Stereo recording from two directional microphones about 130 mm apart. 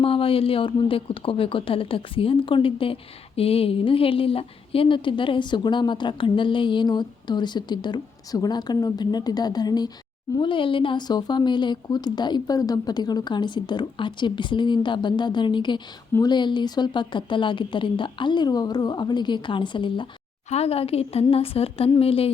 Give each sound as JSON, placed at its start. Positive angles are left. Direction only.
{"t": 0.0, "sound": "speech", "side_deg": 45}
{"t": 20.5, "sound": "a woman's voice", "side_deg": 50}